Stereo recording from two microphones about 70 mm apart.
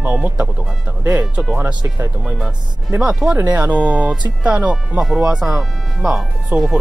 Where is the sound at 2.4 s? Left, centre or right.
Centre.